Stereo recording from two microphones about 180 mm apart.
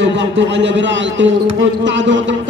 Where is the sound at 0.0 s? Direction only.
85° right.